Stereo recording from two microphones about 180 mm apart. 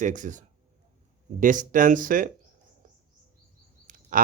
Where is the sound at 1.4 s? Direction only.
50° right (ahead or behind).